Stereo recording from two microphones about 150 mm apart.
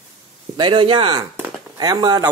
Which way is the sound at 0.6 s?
30° right (ahead or behind).